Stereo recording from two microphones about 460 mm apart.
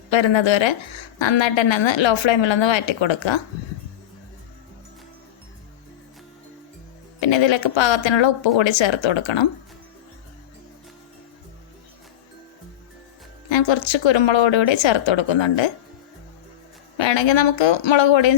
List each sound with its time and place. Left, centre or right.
0.1 s a woman's voice: left
7.2 s a woman's voice: left
13.5 s a woman's voice: left
17.0 s a woman's voice: left